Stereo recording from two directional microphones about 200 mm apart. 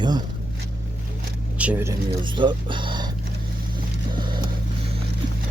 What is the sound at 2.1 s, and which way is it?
Speech, 25° right (ahead or behind).